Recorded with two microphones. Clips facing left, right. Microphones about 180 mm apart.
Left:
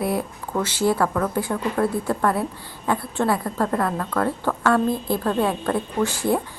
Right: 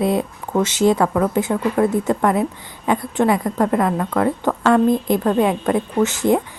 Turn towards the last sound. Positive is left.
turn(degrees=-20)  # may be behind; listen again after turning